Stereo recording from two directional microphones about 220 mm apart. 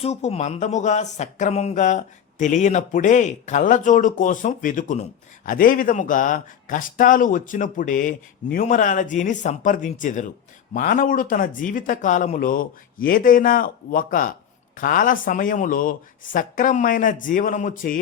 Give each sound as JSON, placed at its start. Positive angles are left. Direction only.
{"t": 0.0, "sound": "speech", "side_deg": 30}